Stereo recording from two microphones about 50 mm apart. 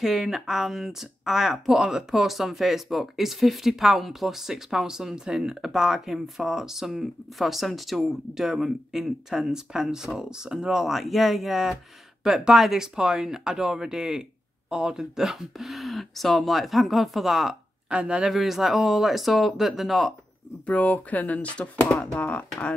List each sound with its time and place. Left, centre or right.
0.0 s speech: centre
17.8 s speech: right
18.2 s speech: centre
20.6 s speech: left